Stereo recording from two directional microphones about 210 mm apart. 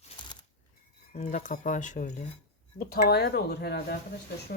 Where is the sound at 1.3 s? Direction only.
40° left (ahead or behind).